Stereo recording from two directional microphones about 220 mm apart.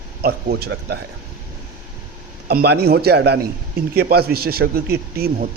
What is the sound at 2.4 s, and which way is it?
A man's voice, 50° right (ahead or behind).